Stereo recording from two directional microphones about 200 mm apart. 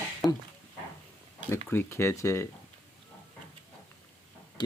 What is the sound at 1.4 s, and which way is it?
Speech, 10° left (ahead or behind).